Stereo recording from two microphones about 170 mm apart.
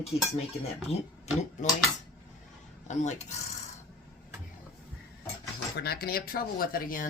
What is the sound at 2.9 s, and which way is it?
Speech, 45° left (ahead or behind).